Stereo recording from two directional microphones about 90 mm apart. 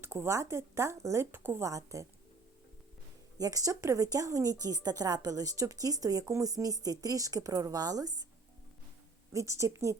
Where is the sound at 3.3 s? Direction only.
40° right (ahead or behind).